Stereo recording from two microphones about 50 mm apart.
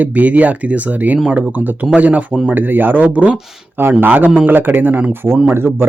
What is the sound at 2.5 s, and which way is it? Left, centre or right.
Speech, right.